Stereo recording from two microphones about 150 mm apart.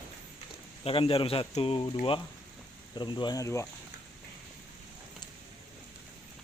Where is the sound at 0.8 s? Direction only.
40° left (ahead or behind); by 3.7 s 20° left (ahead or behind).